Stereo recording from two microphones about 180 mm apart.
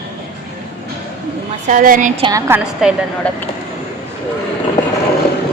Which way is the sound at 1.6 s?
50° right (ahead or behind).